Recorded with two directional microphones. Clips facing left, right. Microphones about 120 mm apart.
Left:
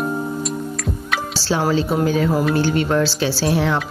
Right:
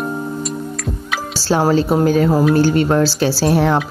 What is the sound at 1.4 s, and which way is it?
A woman's voice, 45° right (ahead or behind).